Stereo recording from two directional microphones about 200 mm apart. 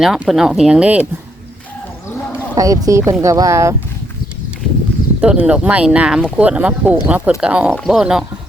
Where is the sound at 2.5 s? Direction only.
15° right (ahead or behind).